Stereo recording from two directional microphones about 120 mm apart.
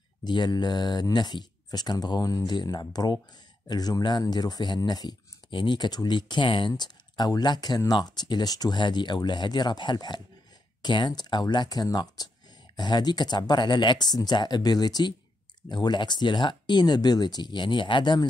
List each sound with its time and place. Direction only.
0.2 s speech: 35° left (ahead or behind)